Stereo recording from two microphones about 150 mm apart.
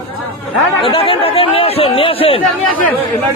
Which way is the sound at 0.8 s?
35° left (ahead or behind).